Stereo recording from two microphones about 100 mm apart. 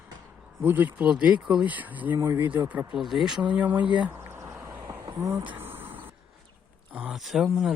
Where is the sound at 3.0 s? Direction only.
Centre (ahead or behind).